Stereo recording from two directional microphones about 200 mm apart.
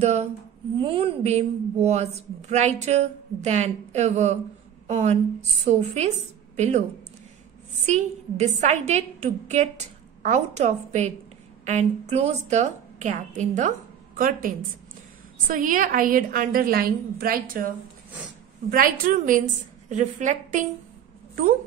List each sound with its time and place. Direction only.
0.0 s a woman's voice: 30° right (ahead or behind)
7.8 s a woman's voice: 35° right (ahead or behind)